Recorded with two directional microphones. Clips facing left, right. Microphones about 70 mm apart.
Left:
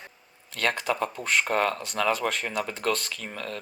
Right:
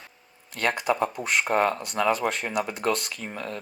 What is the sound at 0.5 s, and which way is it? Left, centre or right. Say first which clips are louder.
Speech: right 2 dB; centre.